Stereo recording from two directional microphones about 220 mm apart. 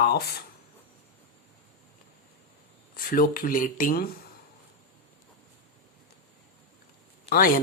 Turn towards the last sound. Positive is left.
turn(degrees=40)  # may be behind; listen again after turning